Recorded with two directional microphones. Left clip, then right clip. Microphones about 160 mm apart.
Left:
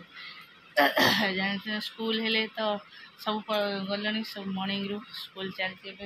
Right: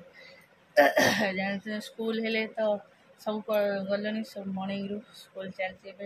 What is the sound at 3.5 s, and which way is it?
Speech, 15° right (ahead or behind).